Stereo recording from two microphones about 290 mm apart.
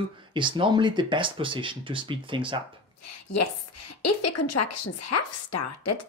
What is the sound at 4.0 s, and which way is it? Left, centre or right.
A woman's voice, left.